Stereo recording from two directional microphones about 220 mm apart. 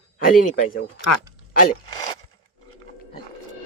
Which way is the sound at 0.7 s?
45° left (ahead or behind).